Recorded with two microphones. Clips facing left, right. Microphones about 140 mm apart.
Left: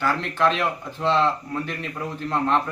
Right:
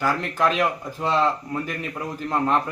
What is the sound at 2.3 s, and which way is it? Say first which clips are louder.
Speech: even; 5° right (ahead or behind).